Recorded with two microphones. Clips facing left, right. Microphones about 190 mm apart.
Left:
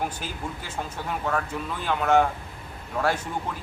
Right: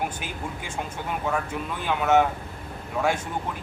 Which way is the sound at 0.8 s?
10° right (ahead or behind).